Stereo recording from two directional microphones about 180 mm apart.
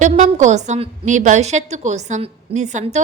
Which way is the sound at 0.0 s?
40° right (ahead or behind).